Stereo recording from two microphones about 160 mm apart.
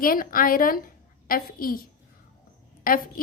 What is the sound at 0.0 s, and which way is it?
A woman's voice, 65° left (ahead or behind).